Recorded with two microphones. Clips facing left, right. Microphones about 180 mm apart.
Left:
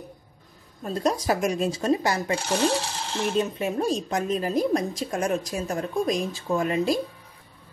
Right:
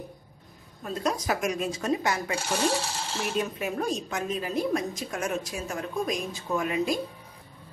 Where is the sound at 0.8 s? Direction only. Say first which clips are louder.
Left 4 dB; 30° left (ahead or behind).